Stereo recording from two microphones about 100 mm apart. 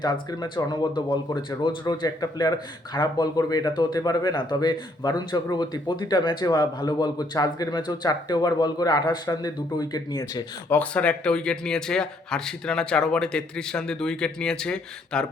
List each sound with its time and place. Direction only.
0.0 s speech: 50° left (ahead or behind)
10.7 s speech: 15° left (ahead or behind)